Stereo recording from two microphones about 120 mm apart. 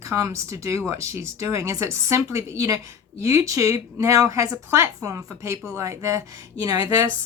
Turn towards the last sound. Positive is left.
turn(degrees=-30)  # may be behind; listen again after turning